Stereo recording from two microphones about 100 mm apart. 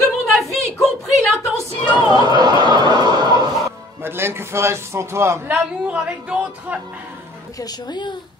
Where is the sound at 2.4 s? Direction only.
45° right (ahead or behind).